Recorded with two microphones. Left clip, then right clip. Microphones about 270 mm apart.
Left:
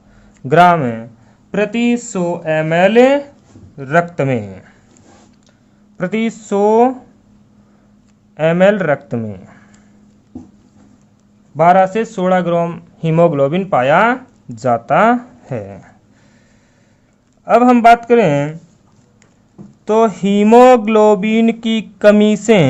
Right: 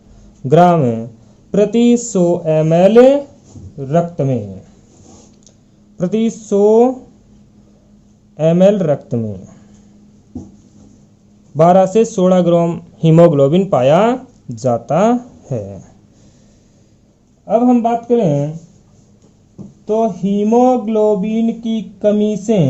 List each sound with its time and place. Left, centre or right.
0.7 s a man's voice: centre
2.8 s a man's voice: left
3.8 s speech: centre
6.0 s speech: centre
8.4 s speech: centre
11.5 s a man's voice: centre
17.5 s a man's voice: left
19.8 s a man's voice: left